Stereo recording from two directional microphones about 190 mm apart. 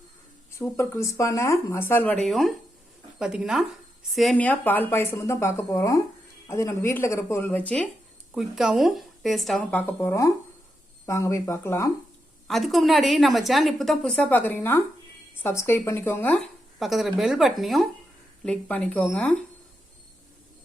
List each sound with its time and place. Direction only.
0.6 s a woman's voice: 15° left (ahead or behind)
12.5 s a woman's voice: centre (ahead or behind)